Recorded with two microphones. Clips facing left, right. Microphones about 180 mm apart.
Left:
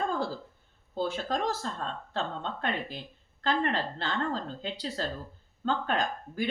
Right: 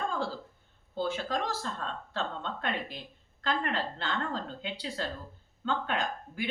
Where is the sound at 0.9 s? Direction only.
45° left (ahead or behind).